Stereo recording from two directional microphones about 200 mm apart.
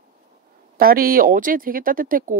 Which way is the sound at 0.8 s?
45° right (ahead or behind).